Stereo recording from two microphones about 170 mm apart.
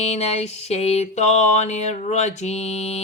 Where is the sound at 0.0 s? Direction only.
40° left (ahead or behind).